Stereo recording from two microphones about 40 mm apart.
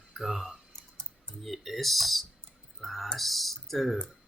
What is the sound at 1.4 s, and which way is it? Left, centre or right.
Speech, centre.